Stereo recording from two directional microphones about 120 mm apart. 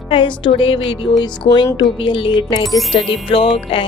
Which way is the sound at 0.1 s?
45° left (ahead or behind).